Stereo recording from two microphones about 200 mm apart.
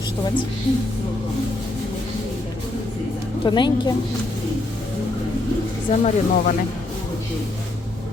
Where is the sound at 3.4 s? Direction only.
20° left (ahead or behind).